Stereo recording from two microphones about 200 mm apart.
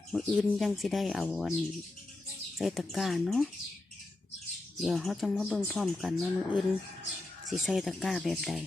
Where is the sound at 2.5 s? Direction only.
Centre (ahead or behind).